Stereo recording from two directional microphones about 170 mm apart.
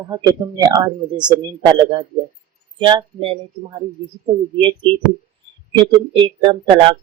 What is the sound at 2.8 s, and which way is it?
Speech, 30° right (ahead or behind).